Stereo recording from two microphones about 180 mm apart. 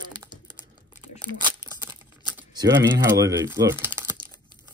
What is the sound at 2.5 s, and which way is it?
Speech, 20° right (ahead or behind).